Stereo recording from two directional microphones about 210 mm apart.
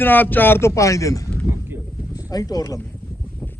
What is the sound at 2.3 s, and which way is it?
Speech, 15° left (ahead or behind).